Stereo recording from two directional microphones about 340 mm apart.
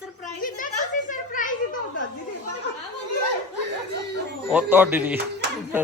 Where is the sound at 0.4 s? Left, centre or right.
Left.